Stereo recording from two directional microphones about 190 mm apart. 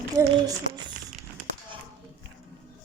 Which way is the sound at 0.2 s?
20° right (ahead or behind).